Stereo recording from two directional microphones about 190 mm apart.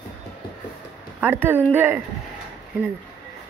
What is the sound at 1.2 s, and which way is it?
Speech, 10° right (ahead or behind).